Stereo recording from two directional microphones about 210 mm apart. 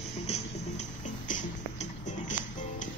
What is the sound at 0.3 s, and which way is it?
Music, 35° left (ahead or behind).